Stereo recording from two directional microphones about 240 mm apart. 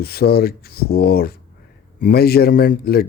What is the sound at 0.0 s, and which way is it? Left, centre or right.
Speech, left.